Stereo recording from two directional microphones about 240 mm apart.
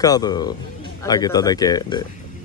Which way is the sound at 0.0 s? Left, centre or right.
Centre.